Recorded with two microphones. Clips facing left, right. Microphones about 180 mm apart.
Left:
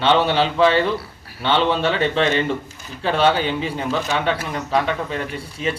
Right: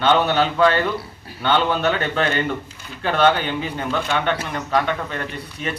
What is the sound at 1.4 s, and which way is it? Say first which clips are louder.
Speech: left 1 dB; centre (ahead or behind).